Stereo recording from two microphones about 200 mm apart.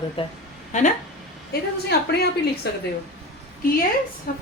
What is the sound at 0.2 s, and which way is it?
Speech, 25° left (ahead or behind).